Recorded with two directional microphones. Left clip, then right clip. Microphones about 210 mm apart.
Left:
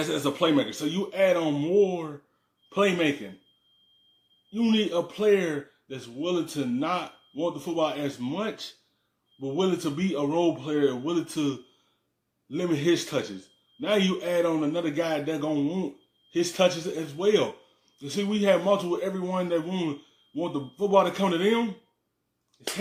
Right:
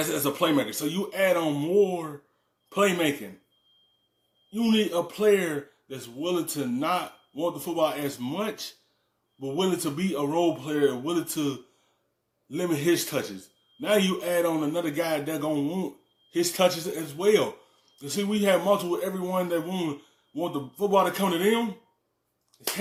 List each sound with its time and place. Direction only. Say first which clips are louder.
0.0 s a man's voice: even; 5° left (ahead or behind)
4.4 s a man's voice: right 1 dB; 5° left (ahead or behind)